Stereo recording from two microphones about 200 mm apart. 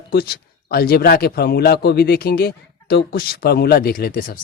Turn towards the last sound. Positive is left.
turn(degrees=45)  # may be behind; listen again after turning